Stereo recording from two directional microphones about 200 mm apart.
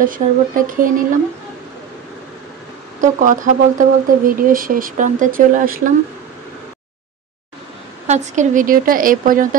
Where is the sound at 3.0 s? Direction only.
40° right (ahead or behind).